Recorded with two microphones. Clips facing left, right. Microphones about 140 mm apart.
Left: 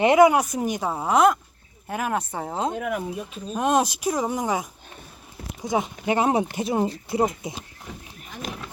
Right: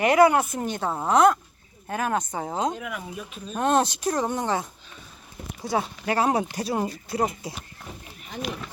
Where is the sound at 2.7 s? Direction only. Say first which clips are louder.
Left 6 dB; 45° left (ahead or behind).